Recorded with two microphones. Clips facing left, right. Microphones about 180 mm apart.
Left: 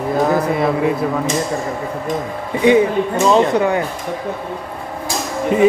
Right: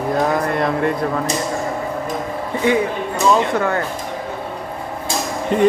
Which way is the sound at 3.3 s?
15° left (ahead or behind).